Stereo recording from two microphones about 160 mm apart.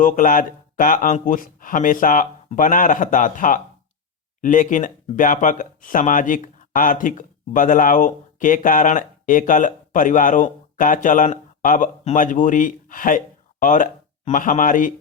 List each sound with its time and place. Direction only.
0.0 s speech: 55° left (ahead or behind)